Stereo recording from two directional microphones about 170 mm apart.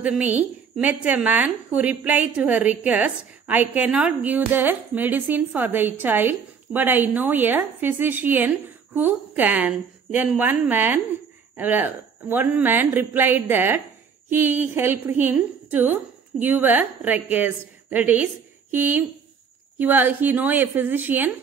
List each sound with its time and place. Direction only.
0.0 s a woman's voice: 10° right (ahead or behind)